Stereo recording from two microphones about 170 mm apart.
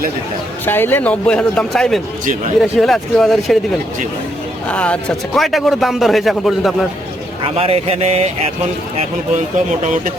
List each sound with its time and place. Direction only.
0.6 s a man's voice: 10° left (ahead or behind)
4.7 s a man's voice: 10° left (ahead or behind)
7.4 s speech: 35° right (ahead or behind)